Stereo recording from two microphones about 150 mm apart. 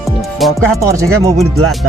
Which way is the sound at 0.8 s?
20° right (ahead or behind).